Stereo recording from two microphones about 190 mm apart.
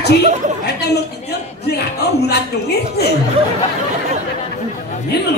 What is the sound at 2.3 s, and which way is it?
Speech, 60° left (ahead or behind).